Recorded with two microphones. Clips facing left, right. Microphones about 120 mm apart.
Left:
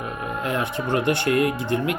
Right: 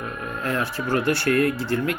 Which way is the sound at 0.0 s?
20° left (ahead or behind).